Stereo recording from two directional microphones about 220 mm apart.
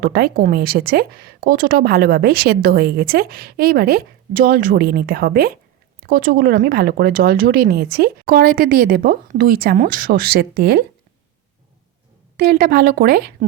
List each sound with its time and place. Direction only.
0.0 s speech: 45° right (ahead or behind)
12.4 s speech: 45° right (ahead or behind)